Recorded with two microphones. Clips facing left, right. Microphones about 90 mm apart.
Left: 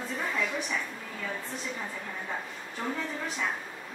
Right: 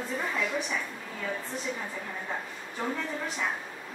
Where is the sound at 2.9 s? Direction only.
Centre (ahead or behind).